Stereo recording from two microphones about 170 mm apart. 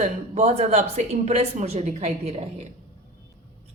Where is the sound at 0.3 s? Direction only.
40° right (ahead or behind).